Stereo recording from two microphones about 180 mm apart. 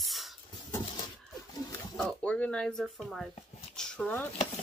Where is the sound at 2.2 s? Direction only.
5° left (ahead or behind).